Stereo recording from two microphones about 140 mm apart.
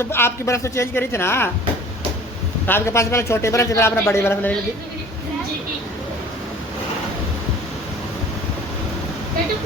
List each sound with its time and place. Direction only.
0.0 s a woman's voice: 15° left (ahead or behind)
2.6 s a man's voice: 15° left (ahead or behind)